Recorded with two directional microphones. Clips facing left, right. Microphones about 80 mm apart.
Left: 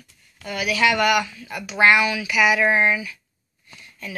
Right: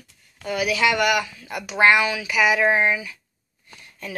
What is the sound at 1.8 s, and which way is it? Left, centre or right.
Speech, right.